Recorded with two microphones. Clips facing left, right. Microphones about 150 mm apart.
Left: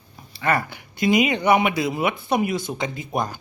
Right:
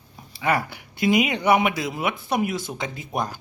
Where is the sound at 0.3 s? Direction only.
10° right (ahead or behind).